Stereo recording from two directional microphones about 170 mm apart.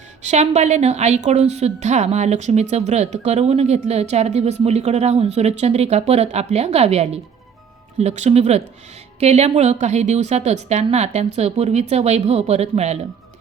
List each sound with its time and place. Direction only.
0.2 s a woman's voice: 40° right (ahead or behind)